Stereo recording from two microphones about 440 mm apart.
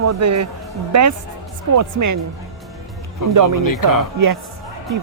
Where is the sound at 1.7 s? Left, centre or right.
Right.